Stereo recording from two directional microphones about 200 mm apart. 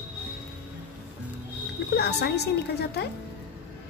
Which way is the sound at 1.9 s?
55° left (ahead or behind).